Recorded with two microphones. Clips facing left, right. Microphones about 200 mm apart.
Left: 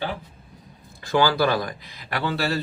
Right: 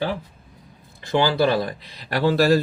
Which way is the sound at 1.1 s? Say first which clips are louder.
Right 1 dB; 25° right (ahead or behind).